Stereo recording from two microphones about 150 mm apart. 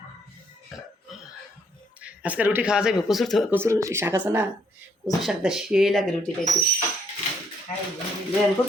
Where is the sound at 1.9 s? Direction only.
10° right (ahead or behind).